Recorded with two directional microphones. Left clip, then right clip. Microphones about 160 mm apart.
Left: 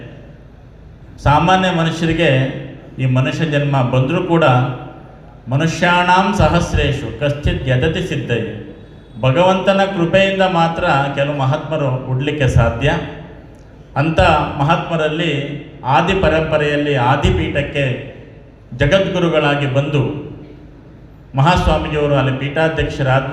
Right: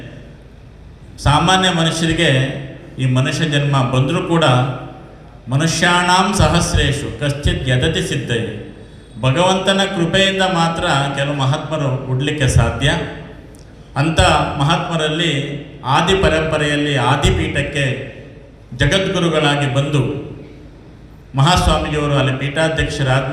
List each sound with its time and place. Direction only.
1.2 s a man's voice: 65° left (ahead or behind)
21.3 s a man's voice: 65° left (ahead or behind)